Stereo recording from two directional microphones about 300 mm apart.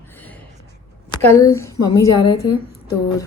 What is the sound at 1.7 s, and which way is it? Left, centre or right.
Speech, left.